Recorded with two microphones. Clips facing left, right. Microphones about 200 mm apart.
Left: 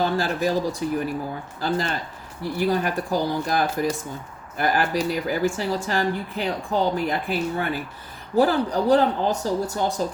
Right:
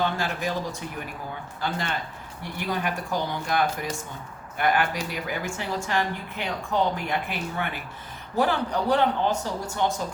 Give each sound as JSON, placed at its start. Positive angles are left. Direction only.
{"t": 0.0, "sound": "speech", "side_deg": 35}